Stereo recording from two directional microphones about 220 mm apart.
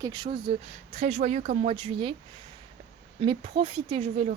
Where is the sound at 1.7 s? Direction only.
25° right (ahead or behind).